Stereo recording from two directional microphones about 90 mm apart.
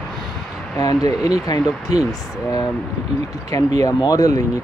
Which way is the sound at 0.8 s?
45° left (ahead or behind).